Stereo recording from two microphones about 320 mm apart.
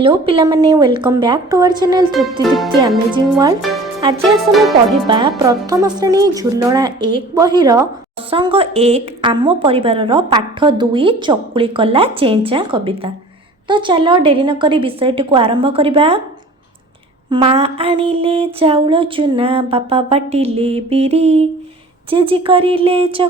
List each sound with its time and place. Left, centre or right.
0.0 s a woman's voice: centre
4.2 s speech: centre
5.0 s a woman's voice: centre
17.2 s a woman's voice: centre